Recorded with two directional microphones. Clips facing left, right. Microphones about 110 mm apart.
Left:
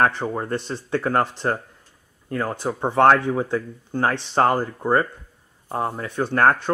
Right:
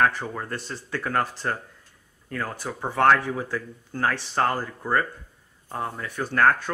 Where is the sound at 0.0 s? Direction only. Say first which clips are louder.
Left 3 dB; 30° left (ahead or behind).